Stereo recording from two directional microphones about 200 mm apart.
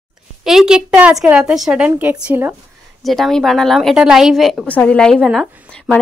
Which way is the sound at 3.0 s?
Centre (ahead or behind).